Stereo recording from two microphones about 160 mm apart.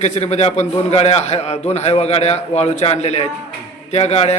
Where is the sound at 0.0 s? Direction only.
45° left (ahead or behind).